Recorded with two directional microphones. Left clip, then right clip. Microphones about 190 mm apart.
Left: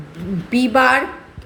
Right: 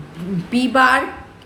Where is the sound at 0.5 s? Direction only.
20° left (ahead or behind).